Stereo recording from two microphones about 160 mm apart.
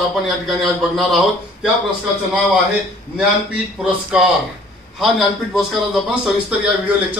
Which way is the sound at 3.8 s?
5° right (ahead or behind).